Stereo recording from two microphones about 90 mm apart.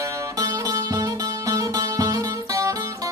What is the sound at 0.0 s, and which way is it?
Music, 40° right (ahead or behind).